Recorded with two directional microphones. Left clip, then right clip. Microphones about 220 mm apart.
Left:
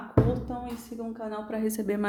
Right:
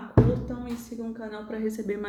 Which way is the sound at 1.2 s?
40° left (ahead or behind).